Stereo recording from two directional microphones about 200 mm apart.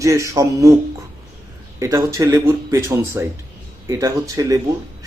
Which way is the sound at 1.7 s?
15° right (ahead or behind).